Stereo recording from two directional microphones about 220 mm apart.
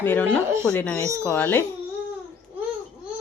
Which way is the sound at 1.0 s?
15° right (ahead or behind).